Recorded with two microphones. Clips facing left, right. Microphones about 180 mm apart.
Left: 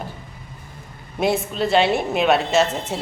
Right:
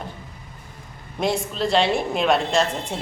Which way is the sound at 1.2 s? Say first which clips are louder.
Left 2 dB; 5° left (ahead or behind).